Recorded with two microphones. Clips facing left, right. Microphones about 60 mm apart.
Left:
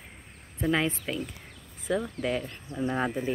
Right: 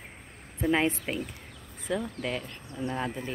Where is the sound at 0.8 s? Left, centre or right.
Right.